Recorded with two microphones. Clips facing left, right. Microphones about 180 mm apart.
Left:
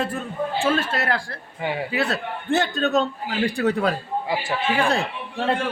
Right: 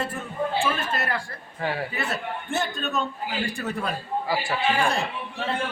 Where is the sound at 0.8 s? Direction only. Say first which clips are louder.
Left 4 dB; 90° left.